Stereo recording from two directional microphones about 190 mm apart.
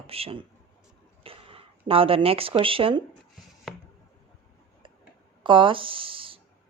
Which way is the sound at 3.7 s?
Centre (ahead or behind).